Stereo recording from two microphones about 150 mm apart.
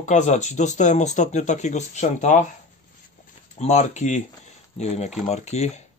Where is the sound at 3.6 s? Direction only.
50° left (ahead or behind).